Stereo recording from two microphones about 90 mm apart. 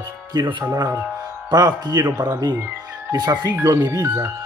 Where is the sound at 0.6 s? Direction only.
35° right (ahead or behind).